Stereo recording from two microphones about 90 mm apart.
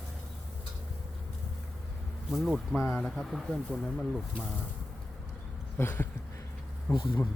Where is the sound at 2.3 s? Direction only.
5° right (ahead or behind).